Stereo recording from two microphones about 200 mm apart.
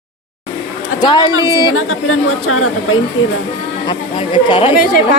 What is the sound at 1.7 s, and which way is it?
Speech, 90° left.